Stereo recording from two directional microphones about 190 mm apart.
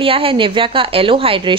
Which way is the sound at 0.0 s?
30° right (ahead or behind).